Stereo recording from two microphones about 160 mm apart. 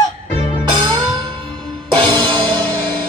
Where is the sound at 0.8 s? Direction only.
25° right (ahead or behind).